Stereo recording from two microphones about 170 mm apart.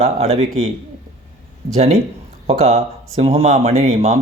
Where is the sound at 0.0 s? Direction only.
35° right (ahead or behind).